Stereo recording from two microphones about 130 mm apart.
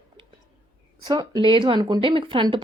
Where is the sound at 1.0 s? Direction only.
35° right (ahead or behind).